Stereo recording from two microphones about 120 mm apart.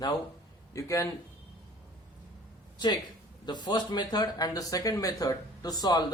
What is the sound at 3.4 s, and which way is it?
Speech, 40° left (ahead or behind).